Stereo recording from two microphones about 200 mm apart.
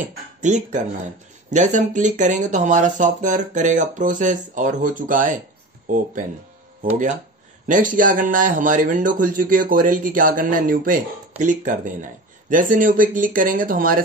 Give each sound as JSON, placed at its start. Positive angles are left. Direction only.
{"t": 0.4, "sound": "speech", "side_deg": -35}